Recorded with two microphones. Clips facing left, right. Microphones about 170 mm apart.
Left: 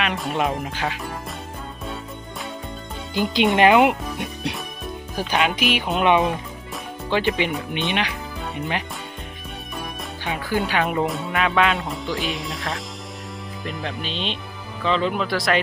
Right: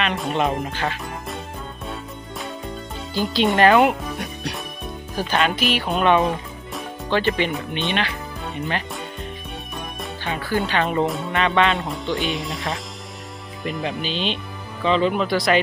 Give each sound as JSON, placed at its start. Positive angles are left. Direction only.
{"t": 0.0, "sound": "speech", "side_deg": 5}
{"t": 3.2, "sound": "speech", "side_deg": 15}
{"t": 5.1, "sound": "speech", "side_deg": 10}
{"t": 10.2, "sound": "speech", "side_deg": 15}